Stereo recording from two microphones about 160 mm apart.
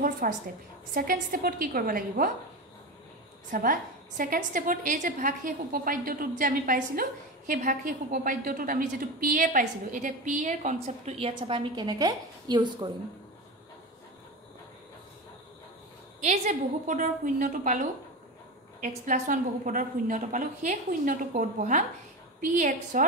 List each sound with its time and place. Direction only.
0.2 s a woman's voice: 60° right (ahead or behind)
3.4 s a woman's voice: 60° right (ahead or behind); by 12.9 s 25° right (ahead or behind)
16.3 s a woman's voice: 50° right (ahead or behind)